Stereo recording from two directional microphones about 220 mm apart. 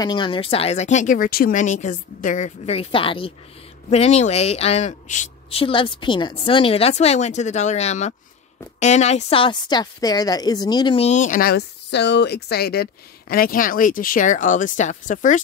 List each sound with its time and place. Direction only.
0.0 s a woman's voice: 20° left (ahead or behind)